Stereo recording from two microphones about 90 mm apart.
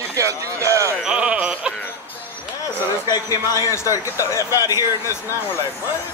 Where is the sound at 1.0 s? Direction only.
10° right (ahead or behind).